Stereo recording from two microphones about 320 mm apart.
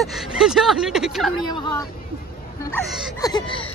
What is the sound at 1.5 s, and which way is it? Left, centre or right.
Speech, centre.